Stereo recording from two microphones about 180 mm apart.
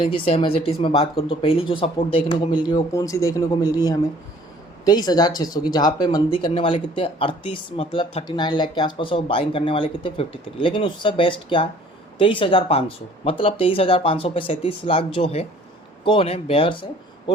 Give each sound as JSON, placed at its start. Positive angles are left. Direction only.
{"t": 0.0, "sound": "speech", "side_deg": 30}